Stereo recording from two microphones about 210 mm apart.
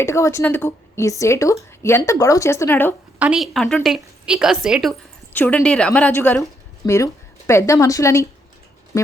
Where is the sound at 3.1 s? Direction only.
5° right (ahead or behind).